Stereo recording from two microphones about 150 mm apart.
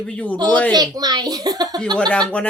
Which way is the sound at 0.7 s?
25° right (ahead or behind).